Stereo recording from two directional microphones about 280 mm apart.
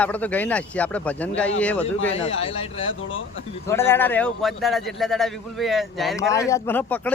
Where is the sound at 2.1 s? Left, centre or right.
Left.